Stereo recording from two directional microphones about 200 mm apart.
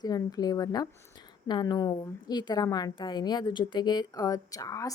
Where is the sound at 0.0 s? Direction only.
20° left (ahead or behind).